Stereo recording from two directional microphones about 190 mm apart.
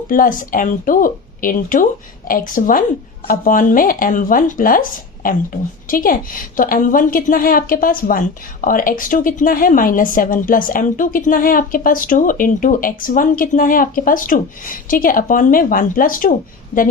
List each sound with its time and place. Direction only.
0.1 s a woman's voice: 45° left (ahead or behind)